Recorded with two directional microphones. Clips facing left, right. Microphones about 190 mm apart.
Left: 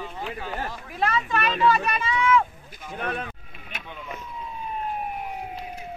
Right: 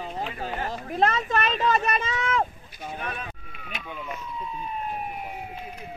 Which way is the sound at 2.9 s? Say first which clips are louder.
Left 5 dB; 55° left (ahead or behind).